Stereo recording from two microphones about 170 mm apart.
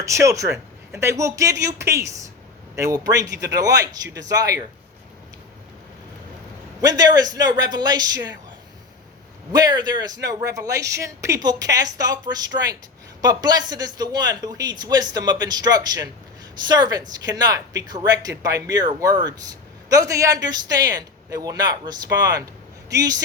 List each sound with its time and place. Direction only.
0.0 s a man's voice: 15° right (ahead or behind)
6.8 s speech: 25° right (ahead or behind)
9.5 s speech: 25° right (ahead or behind)